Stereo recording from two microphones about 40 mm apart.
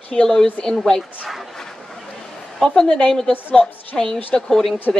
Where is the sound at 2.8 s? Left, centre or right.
Centre.